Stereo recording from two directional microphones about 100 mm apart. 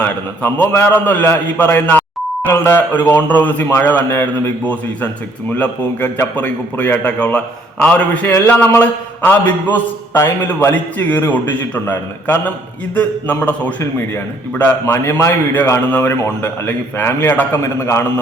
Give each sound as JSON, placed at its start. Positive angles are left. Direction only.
{"t": 0.0, "sound": "a man's voice", "side_deg": 15}